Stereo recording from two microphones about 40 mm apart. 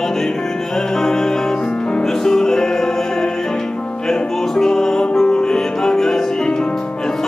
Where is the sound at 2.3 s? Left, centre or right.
Centre.